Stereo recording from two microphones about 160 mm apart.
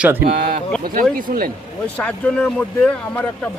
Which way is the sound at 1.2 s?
60° right (ahead or behind).